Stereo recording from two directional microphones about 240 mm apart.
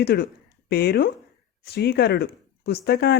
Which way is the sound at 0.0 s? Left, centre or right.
Left.